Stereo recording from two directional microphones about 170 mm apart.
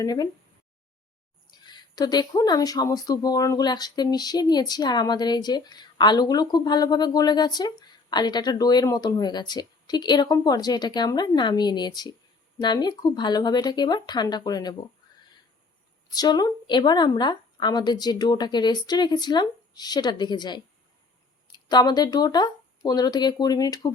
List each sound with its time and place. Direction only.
0.0 s speech: 20° left (ahead or behind)
1.5 s speech: 25° left (ahead or behind)
16.1 s speech: 25° left (ahead or behind)